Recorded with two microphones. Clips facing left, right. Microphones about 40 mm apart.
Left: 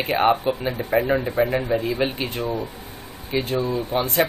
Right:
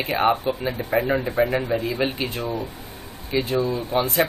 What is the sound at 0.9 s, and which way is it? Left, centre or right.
Speech, centre.